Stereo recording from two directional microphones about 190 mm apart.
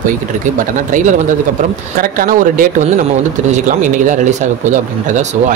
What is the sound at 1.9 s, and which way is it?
A man's voice, 50° right (ahead or behind).